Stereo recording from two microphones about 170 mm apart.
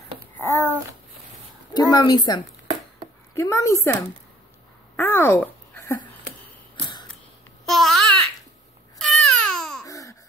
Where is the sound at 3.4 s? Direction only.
15° left (ahead or behind).